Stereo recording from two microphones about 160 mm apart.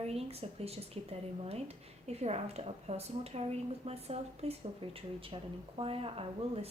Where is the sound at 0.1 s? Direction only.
40° right (ahead or behind).